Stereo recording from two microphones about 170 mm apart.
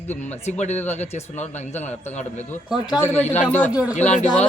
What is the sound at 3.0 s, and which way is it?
Speech, 10° left (ahead or behind).